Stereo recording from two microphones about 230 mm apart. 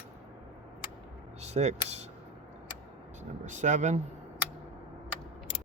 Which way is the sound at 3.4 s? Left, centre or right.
Right.